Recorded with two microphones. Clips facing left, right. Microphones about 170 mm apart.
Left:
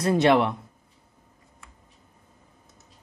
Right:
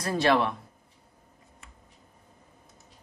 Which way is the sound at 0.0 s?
25° left (ahead or behind).